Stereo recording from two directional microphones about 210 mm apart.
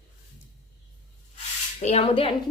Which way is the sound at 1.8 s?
30° left (ahead or behind).